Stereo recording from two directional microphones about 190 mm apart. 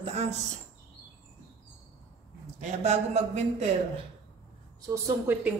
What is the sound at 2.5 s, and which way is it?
A woman's voice, 35° right (ahead or behind).